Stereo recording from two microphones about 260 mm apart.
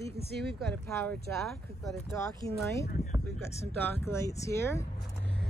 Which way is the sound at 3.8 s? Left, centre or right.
Centre.